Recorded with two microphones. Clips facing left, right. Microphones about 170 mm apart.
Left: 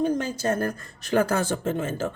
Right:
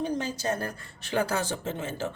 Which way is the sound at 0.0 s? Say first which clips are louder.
Left 5 dB; 50° left (ahead or behind).